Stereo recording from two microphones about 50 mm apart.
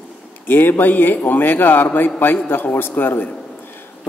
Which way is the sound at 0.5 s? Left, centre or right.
Left.